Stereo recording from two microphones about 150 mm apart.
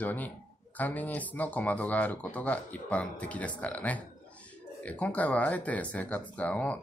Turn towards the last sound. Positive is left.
turn(degrees=10)  # may be behind; listen again after turning